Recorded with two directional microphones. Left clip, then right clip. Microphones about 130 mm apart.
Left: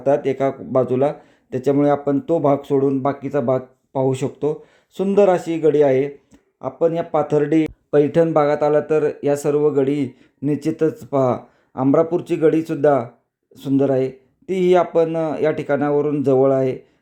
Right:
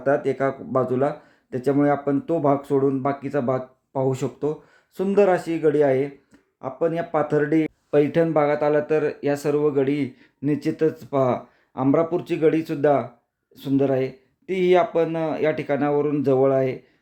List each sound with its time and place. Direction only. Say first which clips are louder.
0.0 s speech: left 3 dB; 30° left (ahead or behind)